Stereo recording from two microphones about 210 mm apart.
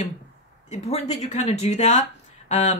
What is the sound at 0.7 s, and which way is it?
Speech, 30° left (ahead or behind).